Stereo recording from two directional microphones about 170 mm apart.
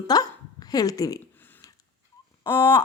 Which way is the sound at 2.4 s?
15° left (ahead or behind).